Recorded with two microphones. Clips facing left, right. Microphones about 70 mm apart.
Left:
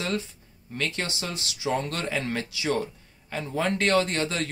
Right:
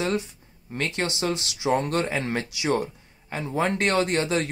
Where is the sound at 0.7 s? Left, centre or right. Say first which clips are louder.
Right 3 dB; right.